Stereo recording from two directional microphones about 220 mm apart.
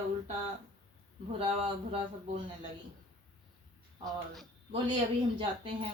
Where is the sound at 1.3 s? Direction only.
25° right (ahead or behind).